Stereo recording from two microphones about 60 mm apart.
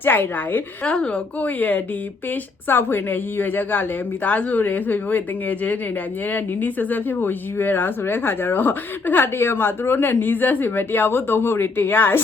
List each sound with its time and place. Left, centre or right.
0.0 s speech: left
0.9 s a woman's voice: centre
1.4 s speech: left